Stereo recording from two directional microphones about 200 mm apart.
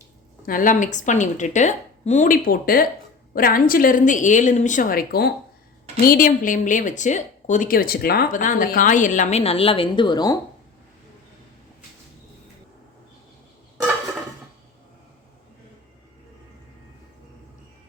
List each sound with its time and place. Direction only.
0.4 s a woman's voice: 45° left (ahead or behind); by 10.3 s 20° left (ahead or behind)